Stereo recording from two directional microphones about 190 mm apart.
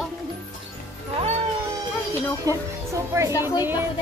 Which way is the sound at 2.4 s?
15° right (ahead or behind).